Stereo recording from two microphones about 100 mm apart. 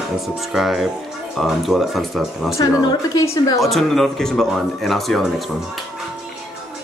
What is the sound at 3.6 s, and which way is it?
Speech, centre (ahead or behind).